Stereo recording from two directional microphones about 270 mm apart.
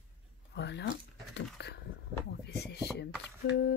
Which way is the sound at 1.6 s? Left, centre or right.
Left.